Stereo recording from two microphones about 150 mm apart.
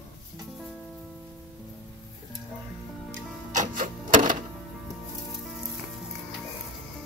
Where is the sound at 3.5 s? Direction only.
60° right (ahead or behind).